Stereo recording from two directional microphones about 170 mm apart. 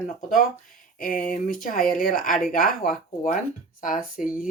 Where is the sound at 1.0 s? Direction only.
55° left (ahead or behind).